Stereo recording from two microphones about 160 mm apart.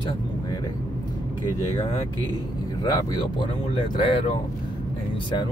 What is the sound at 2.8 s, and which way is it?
Speech, 25° left (ahead or behind).